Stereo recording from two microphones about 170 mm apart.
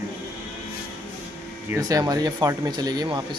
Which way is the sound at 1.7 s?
20° right (ahead or behind).